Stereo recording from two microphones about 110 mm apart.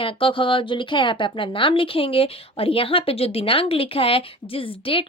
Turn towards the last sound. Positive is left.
turn(degrees=55)  # may be behind; listen again after turning